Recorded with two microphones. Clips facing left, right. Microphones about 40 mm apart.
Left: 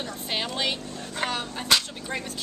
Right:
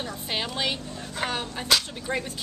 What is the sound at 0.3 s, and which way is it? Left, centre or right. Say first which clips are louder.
Speech: even; centre.